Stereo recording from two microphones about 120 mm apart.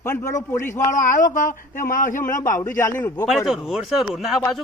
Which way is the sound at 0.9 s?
90° left.